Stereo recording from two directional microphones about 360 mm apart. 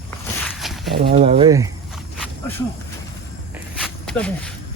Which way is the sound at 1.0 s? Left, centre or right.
Right.